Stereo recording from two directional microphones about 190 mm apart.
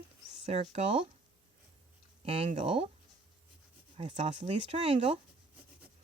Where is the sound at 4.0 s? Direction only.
35° right (ahead or behind).